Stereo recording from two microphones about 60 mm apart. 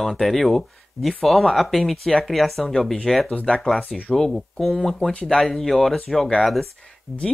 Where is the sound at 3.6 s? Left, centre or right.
Centre.